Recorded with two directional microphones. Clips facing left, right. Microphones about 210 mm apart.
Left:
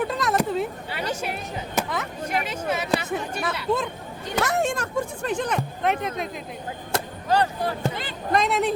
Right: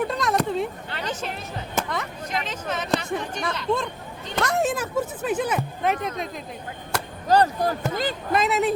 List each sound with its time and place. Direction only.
0.0 s a sound: centre (ahead or behind)
1.9 s speech: 5° left (ahead or behind)
7.3 s speech: 40° right (ahead or behind)
8.3 s speech: 5° right (ahead or behind)